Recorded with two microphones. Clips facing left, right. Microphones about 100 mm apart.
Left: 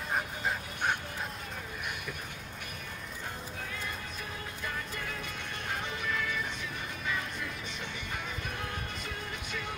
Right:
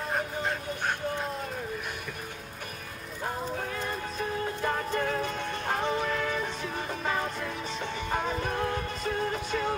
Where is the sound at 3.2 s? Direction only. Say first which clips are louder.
Right 10 dB; 45° right (ahead or behind).